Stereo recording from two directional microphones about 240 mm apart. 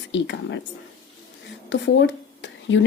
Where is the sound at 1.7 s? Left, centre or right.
Left.